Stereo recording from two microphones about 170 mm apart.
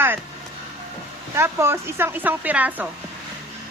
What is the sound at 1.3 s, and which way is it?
A woman's voice, 15° right (ahead or behind).